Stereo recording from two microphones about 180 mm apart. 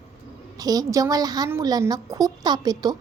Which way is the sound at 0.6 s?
20° right (ahead or behind).